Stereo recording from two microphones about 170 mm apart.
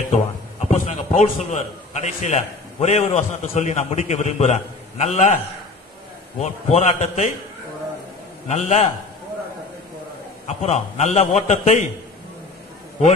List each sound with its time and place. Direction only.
0.6 s a man's voice: 40° left (ahead or behind)
6.4 s a man's voice: 40° left (ahead or behind)
8.5 s a man's voice: 40° left (ahead or behind)
10.4 s a man's voice: 40° left (ahead or behind)